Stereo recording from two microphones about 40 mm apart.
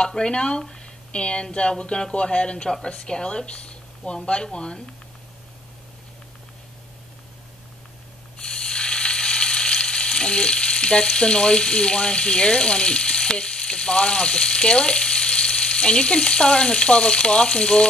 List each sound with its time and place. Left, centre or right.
0.0 s speech: left
8.4 s frying: centre